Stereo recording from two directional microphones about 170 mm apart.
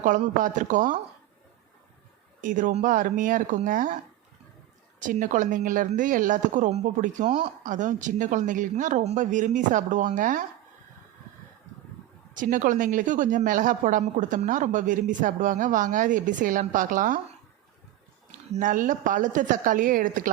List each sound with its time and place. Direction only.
0.0 s speech: 50° right (ahead or behind)
2.4 s speech: 50° right (ahead or behind)
4.9 s speech: 50° right (ahead or behind)
12.3 s speech: 50° right (ahead or behind)
18.3 s speech: 50° right (ahead or behind)